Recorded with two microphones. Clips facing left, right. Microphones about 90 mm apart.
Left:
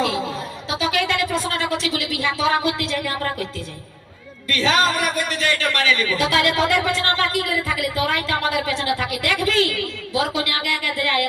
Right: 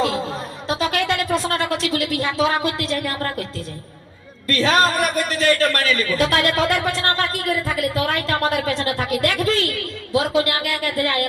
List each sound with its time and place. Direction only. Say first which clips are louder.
0.7 s a man's voice: right 1 dB; 45° right (ahead or behind)
4.4 s a man's voice: right 2 dB; 45° right (ahead or behind)